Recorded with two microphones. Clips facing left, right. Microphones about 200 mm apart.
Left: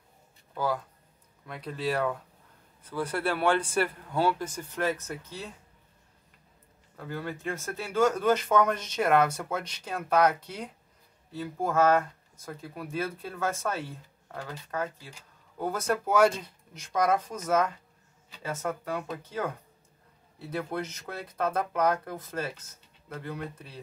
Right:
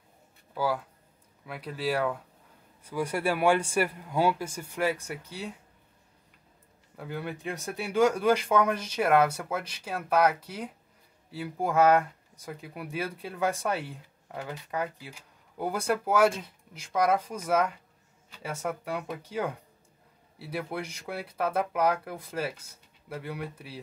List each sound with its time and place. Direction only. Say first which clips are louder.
0.6 s speech: right 1 dB; 5° right (ahead or behind)
7.0 s speech: even; 15° right (ahead or behind)